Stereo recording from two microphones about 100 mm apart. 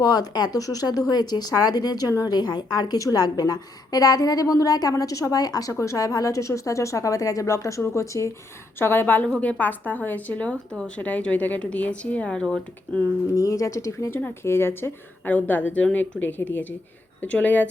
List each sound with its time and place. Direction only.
0.0 s a woman's voice: 40° left (ahead or behind); by 12.5 s 5° left (ahead or behind)
13.3 s a woman's voice: 30° left (ahead or behind); by 17.7 s 15° left (ahead or behind)